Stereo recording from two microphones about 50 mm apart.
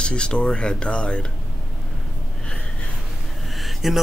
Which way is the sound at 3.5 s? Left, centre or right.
Centre.